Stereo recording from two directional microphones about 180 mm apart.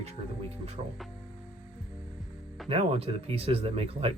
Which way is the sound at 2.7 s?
35° right (ahead or behind).